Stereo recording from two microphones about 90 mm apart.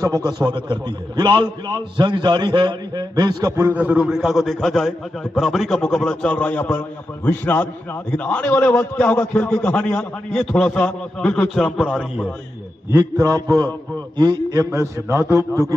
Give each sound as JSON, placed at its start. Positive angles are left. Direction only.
{"t": 0.0, "sound": "a man's voice", "side_deg": -45}
{"t": 3.7, "sound": "a man's voice", "side_deg": -15}
{"t": 11.4, "sound": "a man's voice", "side_deg": 0}
{"t": 13.2, "sound": "a man's voice", "side_deg": -40}
{"t": 14.1, "sound": "a man's voice", "side_deg": -55}
{"t": 14.5, "sound": "a man's voice", "side_deg": -30}